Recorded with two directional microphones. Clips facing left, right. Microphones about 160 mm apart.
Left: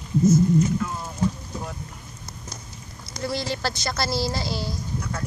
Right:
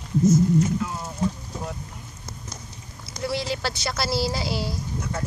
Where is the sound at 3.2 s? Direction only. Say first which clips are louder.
Even; 5° right (ahead or behind).